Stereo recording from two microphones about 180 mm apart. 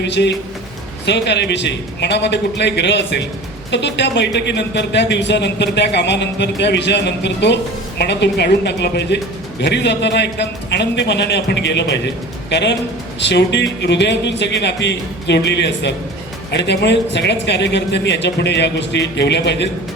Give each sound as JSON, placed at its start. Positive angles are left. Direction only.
{"t": 0.0, "sound": "speech", "side_deg": 75}